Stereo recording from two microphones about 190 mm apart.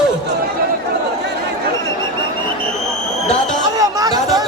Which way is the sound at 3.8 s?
20° right (ahead or behind).